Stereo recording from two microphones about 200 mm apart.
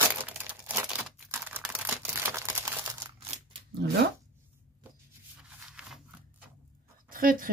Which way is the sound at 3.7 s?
55° right (ahead or behind).